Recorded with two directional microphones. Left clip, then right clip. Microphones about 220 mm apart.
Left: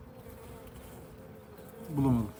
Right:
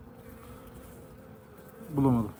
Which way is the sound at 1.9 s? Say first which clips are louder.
Right 3 dB; centre (ahead or behind).